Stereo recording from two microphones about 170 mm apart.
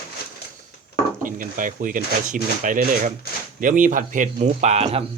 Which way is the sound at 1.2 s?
50° right (ahead or behind).